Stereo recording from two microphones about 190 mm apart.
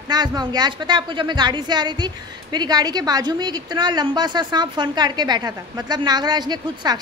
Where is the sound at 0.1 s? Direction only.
20° right (ahead or behind).